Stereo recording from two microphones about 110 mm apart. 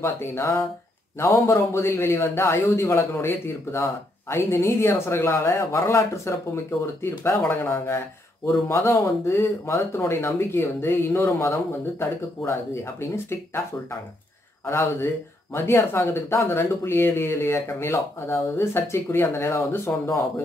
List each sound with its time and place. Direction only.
0.0 s a man's voice: 20° left (ahead or behind)
14.7 s a man's voice: 25° left (ahead or behind)